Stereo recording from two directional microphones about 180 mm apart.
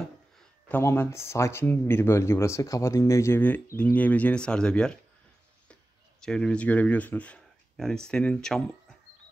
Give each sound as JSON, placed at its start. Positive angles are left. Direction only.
{"t": 0.7, "sound": "speech", "side_deg": 10}
{"t": 6.2, "sound": "speech", "side_deg": 5}